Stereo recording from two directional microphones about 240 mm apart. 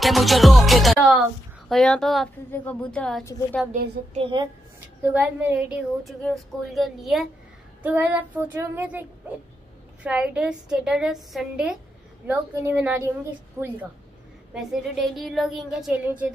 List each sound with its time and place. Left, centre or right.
0.0 s a woman's voice: centre
3.7 s speech: right
4.2 s a woman's voice: centre
5.0 s a woman's voice: centre
7.8 s child singing: centre
10.0 s a woman's voice: centre
12.3 s child singing: centre
14.5 s a woman's voice: centre